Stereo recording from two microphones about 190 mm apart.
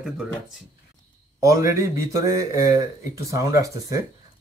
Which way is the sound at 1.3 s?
15° right (ahead or behind).